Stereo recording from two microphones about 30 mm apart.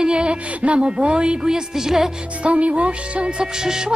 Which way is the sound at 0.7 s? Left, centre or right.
Right.